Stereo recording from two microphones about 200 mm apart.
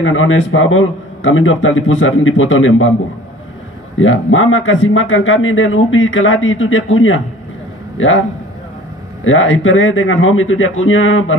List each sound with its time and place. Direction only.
0.0 s speech: 80° left
4.0 s speech: 75° left (ahead or behind)